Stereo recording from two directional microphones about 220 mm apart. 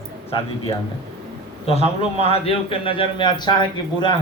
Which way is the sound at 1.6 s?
25° left (ahead or behind).